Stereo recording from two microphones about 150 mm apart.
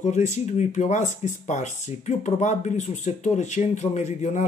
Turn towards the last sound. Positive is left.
turn(degrees=50)  # may be behind; listen again after turning